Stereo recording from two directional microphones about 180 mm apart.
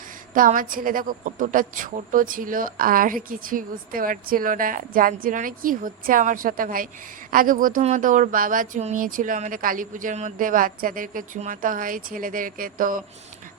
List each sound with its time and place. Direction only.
0.3 s a woman's voice: 50° right (ahead or behind)